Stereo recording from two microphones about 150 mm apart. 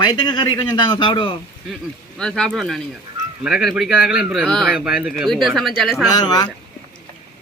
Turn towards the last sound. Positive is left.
turn(degrees=25)  # may be behind; listen again after turning